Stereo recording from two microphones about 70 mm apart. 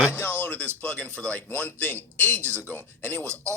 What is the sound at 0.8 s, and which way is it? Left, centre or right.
Speech, centre.